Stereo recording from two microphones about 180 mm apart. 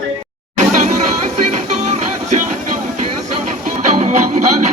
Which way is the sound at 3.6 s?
45° right (ahead or behind).